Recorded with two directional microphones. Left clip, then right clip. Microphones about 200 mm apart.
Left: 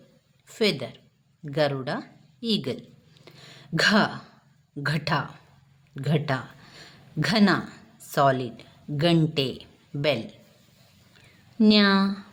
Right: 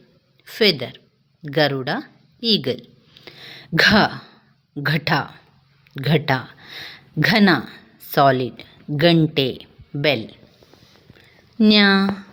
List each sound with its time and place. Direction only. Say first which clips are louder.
0.4 s speech: right 7 dB; 15° right (ahead or behind)
3.2 s a sound: right 8 dB; 20° right (ahead or behind)
4.7 s speech: right 6 dB; 20° right (ahead or behind)